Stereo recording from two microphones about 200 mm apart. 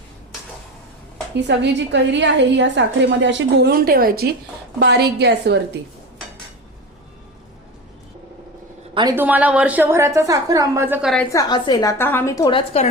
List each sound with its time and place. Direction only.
1.4 s a woman's voice: 60° right (ahead or behind)
9.0 s a woman's voice: 15° right (ahead or behind)
11.3 s a woman's voice: 20° left (ahead or behind)